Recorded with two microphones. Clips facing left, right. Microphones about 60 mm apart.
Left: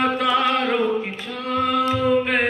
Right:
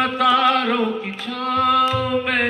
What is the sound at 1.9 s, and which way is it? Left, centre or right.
Mantra, left.